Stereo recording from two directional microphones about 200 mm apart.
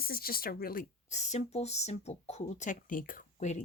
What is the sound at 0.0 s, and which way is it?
Speech, 50° left (ahead or behind).